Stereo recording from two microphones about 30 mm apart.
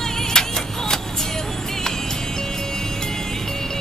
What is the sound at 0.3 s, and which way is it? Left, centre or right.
Music, left.